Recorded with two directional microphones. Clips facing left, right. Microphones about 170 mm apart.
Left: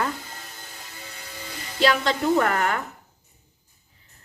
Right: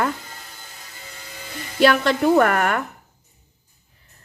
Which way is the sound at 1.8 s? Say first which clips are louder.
Right 5 dB; 60° right (ahead or behind).